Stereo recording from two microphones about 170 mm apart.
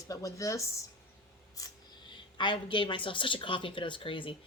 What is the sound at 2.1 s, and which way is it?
A woman's voice, 30° left (ahead or behind).